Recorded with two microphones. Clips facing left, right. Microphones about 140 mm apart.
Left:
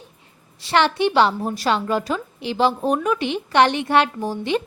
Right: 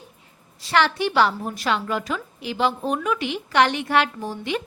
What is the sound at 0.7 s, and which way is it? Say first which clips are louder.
A woman's voice: left 3 dB; 25° left (ahead or behind).